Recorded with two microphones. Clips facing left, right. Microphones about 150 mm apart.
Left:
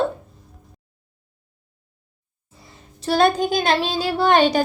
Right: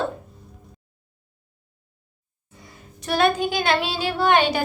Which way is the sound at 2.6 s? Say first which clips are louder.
Left 4 dB; 30° left (ahead or behind).